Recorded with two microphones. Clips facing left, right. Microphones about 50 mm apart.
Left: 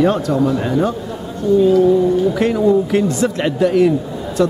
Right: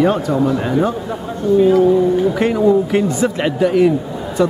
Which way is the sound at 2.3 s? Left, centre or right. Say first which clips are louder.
Right 1 dB; centre.